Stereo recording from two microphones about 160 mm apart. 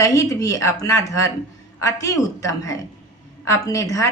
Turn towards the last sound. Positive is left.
turn(degrees=20)  # may be behind; listen again after turning